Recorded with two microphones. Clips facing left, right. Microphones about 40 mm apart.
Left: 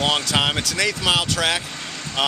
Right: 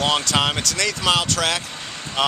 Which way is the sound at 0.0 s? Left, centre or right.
Centre.